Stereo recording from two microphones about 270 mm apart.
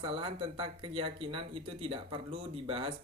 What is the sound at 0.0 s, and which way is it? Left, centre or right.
Speech, centre.